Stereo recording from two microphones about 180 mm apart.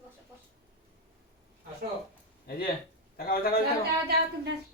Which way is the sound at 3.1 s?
55° left (ahead or behind).